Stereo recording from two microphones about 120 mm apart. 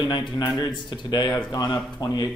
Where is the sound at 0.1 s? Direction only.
40° left (ahead or behind).